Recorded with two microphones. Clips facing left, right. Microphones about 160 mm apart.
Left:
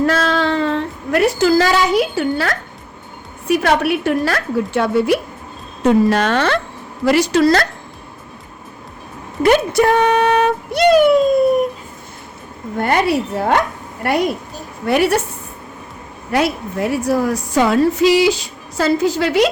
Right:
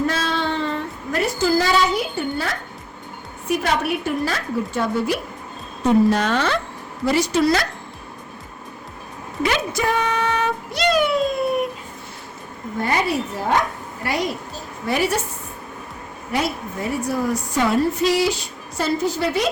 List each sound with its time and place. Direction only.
0.0 s a sound: 75° left (ahead or behind)
3.5 s a woman's voice: 70° left (ahead or behind)
7.0 s a woman's voice: 90° left
9.4 s speech: 60° left (ahead or behind)
12.8 s a woman's voice: 65° left (ahead or behind)
16.3 s a woman's voice: 85° left